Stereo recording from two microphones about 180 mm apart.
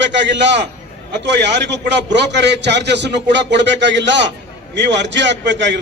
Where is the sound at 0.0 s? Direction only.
80° right.